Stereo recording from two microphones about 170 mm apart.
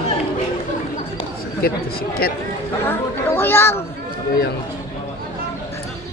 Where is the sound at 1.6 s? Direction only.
65° left (ahead or behind).